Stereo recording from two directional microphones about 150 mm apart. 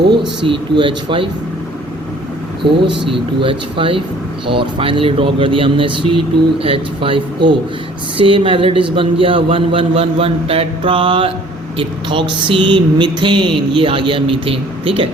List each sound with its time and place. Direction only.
0.4 s speech: 35° right (ahead or behind)
3.1 s speech: 35° right (ahead or behind)
8.2 s speech: 35° right (ahead or behind)